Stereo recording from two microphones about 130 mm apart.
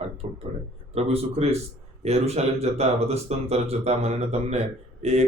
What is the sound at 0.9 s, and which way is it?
Speech, 50° right (ahead or behind).